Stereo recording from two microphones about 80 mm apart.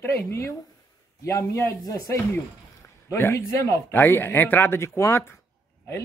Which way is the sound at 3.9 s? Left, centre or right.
Left.